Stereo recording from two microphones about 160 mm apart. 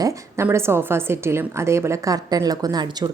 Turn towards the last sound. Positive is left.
turn(degrees=-25)  # may be behind; listen again after turning